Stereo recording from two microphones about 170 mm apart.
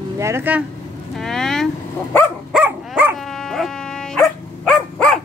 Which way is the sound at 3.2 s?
Centre (ahead or behind).